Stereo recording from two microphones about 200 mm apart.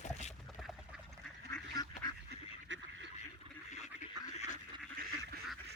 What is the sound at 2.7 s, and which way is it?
Duck, 70° right (ahead or behind).